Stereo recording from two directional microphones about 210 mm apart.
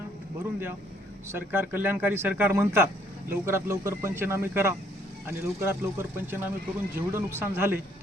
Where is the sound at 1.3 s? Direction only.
10° right (ahead or behind).